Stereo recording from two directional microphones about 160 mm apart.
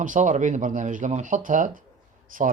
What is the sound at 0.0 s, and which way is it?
Speech, 55° right (ahead or behind).